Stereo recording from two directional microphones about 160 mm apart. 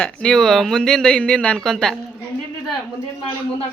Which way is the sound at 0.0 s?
5° left (ahead or behind).